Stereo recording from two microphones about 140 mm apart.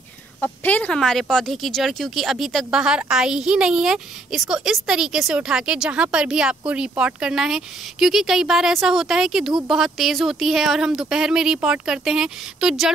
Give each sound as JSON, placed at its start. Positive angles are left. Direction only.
{"t": 0.4, "sound": "speech", "side_deg": 10}